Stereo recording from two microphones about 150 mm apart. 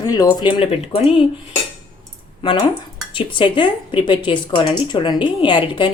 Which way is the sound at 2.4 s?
35° left (ahead or behind).